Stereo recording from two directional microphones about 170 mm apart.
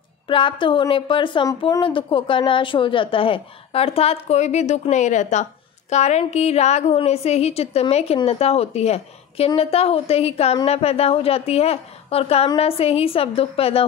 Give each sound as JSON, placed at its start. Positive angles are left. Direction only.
{"t": 0.3, "sound": "a woman's voice", "side_deg": 30}